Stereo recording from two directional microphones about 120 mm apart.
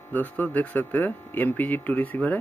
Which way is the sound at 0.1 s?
15° left (ahead or behind).